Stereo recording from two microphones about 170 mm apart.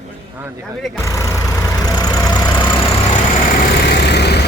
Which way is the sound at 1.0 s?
20° left (ahead or behind).